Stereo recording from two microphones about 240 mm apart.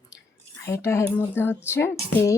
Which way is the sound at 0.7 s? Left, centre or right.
Centre.